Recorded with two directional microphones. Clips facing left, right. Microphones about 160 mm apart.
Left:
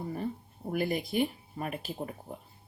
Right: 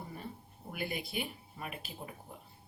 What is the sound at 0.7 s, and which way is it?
Speech, 45° left (ahead or behind).